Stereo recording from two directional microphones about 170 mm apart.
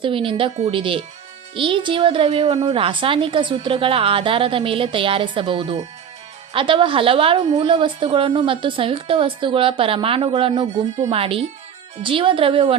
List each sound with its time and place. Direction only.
0.0 s a woman's voice: 30° right (ahead or behind)